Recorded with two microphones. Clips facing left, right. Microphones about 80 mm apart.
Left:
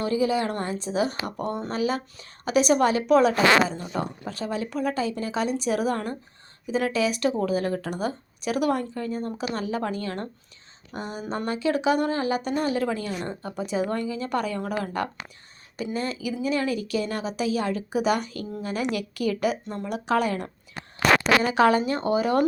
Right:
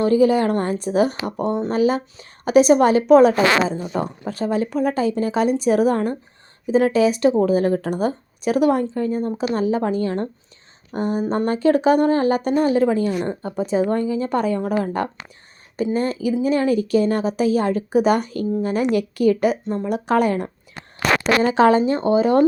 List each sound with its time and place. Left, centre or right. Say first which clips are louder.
0.0 s a woman's voice: right 8 dB; right
10.9 s a woman's voice: right 10 dB; right
21.4 s speech: right 5 dB; right